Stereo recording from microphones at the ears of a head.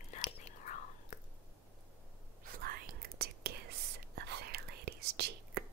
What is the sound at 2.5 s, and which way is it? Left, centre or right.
Whispering, right.